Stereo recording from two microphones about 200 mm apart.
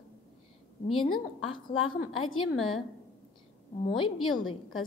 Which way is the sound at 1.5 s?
25° left (ahead or behind).